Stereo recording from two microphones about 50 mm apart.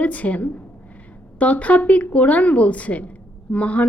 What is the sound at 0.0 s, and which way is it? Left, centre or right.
A woman's voice, left.